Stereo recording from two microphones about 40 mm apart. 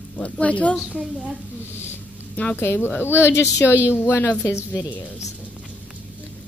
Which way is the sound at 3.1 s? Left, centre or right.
Left.